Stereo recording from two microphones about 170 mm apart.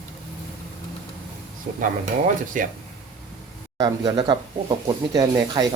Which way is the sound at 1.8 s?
50° right (ahead or behind).